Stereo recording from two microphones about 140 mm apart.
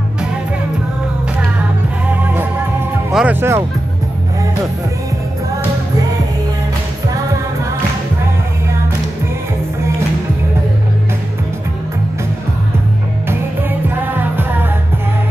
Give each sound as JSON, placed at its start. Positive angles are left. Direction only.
{"t": 3.1, "sound": "music", "side_deg": -5}
{"t": 3.3, "sound": "speech", "side_deg": -20}
{"t": 13.3, "sound": "music", "side_deg": -15}